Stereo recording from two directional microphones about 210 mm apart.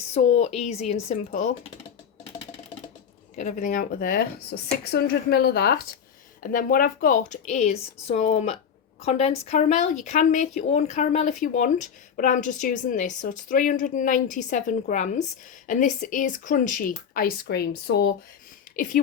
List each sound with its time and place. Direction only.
0.1 s speech: 30° left (ahead or behind)
3.3 s speech: 35° left (ahead or behind)